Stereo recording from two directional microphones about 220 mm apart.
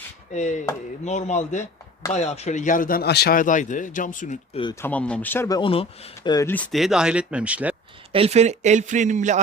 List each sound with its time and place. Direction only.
0.3 s speech: 35° left (ahead or behind)
4.6 s speech: 10° left (ahead or behind); by 7.8 s 5° right (ahead or behind)
8.1 s a man's voice: 25° right (ahead or behind)